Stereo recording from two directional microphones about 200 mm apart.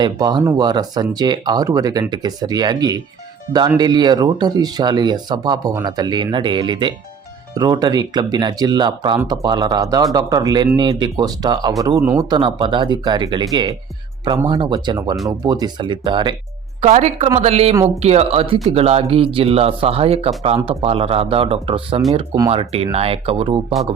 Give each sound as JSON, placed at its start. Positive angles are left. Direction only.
{"t": 0.0, "sound": "speech", "side_deg": -20}
{"t": 16.8, "sound": "a woman's voice", "side_deg": -35}